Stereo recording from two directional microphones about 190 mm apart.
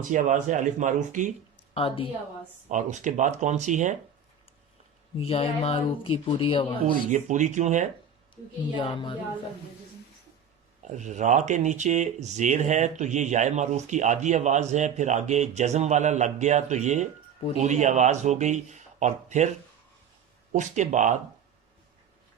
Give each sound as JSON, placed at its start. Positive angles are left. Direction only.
{"t": 0.0, "sound": "speech", "side_deg": -45}
{"t": 1.7, "sound": "speech", "side_deg": 30}
{"t": 2.6, "sound": "speech", "side_deg": -40}
{"t": 5.1, "sound": "speech", "side_deg": 30}
{"t": 6.8, "sound": "speech", "side_deg": -40}
{"t": 8.7, "sound": "speech", "side_deg": 25}
{"t": 10.8, "sound": "speech", "side_deg": -40}
{"t": 20.5, "sound": "speech", "side_deg": -40}